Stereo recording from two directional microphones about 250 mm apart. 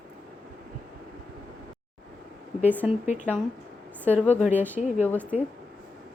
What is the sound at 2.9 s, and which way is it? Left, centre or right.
Speech, left.